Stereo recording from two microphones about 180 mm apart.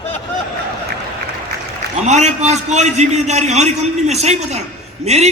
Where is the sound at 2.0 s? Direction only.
40° right (ahead or behind).